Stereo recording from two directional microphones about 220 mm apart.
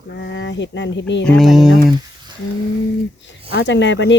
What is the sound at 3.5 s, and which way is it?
Speech, 55° left (ahead or behind).